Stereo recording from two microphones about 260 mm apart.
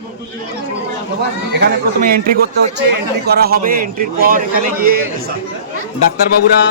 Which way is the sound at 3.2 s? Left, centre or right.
Right.